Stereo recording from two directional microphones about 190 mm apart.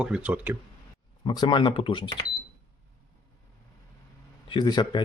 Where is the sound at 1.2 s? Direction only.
25° left (ahead or behind).